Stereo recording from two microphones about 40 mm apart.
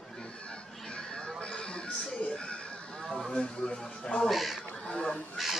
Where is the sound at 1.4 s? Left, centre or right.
Left.